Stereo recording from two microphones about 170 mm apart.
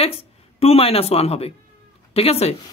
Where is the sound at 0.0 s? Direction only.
35° left (ahead or behind).